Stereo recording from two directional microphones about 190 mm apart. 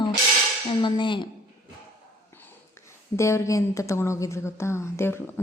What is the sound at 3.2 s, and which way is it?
Speech, 15° left (ahead or behind).